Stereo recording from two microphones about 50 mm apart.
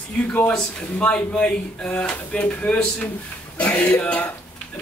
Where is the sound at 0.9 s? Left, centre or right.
Left.